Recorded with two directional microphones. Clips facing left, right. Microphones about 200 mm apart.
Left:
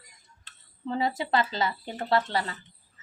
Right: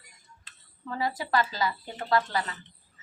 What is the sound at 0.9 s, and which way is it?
Speech, 25° left (ahead or behind).